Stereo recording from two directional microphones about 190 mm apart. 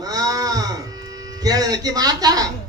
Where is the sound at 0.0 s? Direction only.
20° right (ahead or behind).